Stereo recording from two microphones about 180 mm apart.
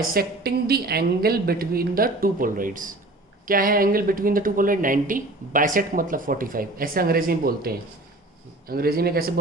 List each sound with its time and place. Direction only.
0.0 s a woman's voice: 55° right (ahead or behind)